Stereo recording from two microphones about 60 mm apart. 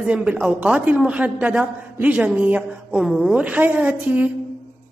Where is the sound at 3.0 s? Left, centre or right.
Centre.